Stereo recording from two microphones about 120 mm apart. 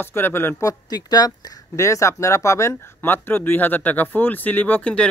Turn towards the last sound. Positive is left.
turn(degrees=10)  # may be behind; listen again after turning